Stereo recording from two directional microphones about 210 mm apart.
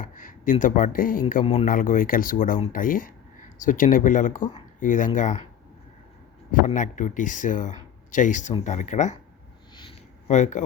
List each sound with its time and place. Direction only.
0.0 s speech: 40° left (ahead or behind)
6.5 s speech: 35° left (ahead or behind)
10.2 s speech: 35° left (ahead or behind)